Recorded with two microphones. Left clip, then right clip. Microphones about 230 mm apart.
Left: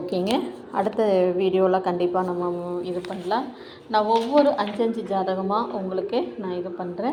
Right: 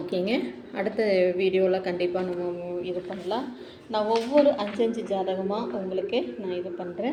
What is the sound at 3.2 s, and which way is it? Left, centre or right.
Speech, centre.